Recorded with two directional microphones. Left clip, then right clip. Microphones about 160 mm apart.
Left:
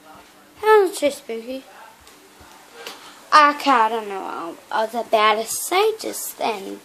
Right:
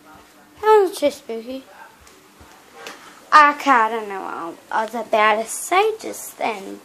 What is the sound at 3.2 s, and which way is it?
A woman's voice, 5° left (ahead or behind).